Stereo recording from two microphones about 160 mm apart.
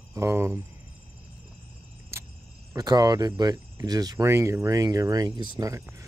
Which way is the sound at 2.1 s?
15° right (ahead or behind).